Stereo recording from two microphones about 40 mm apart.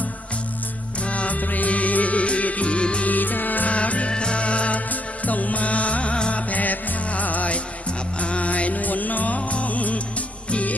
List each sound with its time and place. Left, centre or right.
1.0 s music: left
3.1 s music: left
3.7 s music: left
6.5 s music: left